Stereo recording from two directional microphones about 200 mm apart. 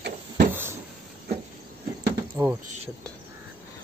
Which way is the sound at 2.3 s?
10° right (ahead or behind).